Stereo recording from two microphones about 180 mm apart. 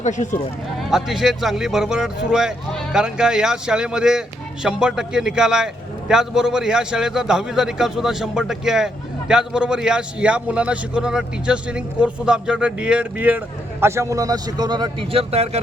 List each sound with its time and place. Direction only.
0.0 s speech: 40° left (ahead or behind)
0.9 s a man's voice: 5° right (ahead or behind); by 15.4 s 35° right (ahead or behind)